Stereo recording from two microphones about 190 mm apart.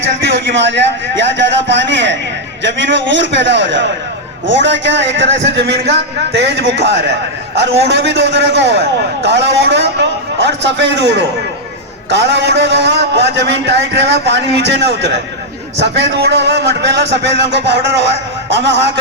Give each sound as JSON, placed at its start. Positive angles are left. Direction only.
{"t": 0.4, "sound": "a man's voice", "side_deg": -70}
{"t": 18.5, "sound": "a man's voice", "side_deg": -65}